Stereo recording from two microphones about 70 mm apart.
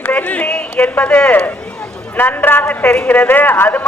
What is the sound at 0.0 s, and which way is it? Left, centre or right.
Run, left.